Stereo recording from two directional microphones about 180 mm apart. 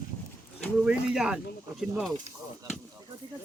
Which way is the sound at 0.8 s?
5° right (ahead or behind).